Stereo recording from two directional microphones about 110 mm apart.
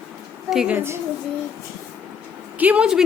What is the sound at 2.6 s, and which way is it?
Speech, 10° right (ahead or behind).